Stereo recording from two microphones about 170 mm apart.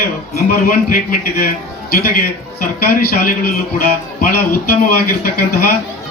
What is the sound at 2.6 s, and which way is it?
Speech, 60° left (ahead or behind).